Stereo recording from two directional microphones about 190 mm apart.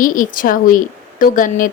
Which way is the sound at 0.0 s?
45° left (ahead or behind).